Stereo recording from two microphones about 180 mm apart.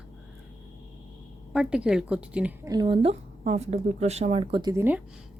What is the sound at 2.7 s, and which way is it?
Speech, 25° right (ahead or behind).